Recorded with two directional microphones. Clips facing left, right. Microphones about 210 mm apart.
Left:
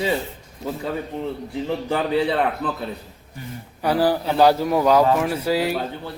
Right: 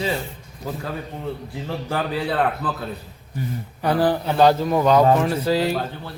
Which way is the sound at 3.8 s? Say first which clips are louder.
Even; 10° left (ahead or behind).